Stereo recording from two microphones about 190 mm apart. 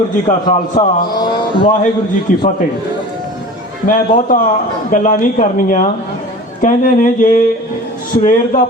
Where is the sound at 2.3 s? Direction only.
45° left (ahead or behind).